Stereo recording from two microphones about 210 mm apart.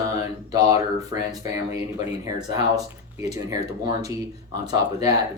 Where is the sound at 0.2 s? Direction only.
15° right (ahead or behind).